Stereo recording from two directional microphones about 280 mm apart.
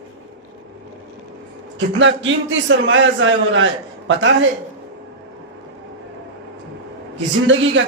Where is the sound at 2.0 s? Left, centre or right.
Right.